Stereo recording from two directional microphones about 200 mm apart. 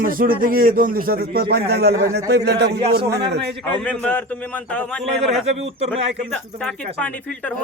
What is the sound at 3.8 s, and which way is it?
A man's voice, 5° left (ahead or behind).